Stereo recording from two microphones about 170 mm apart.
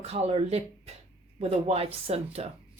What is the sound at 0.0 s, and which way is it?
Speech, 35° right (ahead or behind).